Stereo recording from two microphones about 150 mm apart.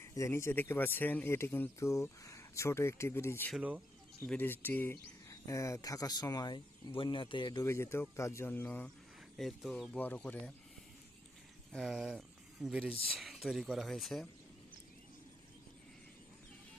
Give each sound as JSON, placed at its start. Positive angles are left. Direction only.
{"t": 0.0, "sound": "speech", "side_deg": 20}
{"t": 7.6, "sound": "speech", "side_deg": 20}
{"t": 9.4, "sound": "speech", "side_deg": 0}
{"t": 11.7, "sound": "speech", "side_deg": -5}